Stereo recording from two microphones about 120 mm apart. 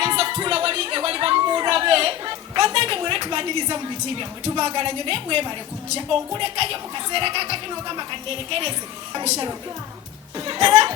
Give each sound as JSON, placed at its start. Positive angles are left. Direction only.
{"t": 0.0, "sound": "music", "side_deg": -45}
{"t": 6.0, "sound": "speech", "side_deg": -40}
{"t": 10.3, "sound": "speech", "side_deg": -35}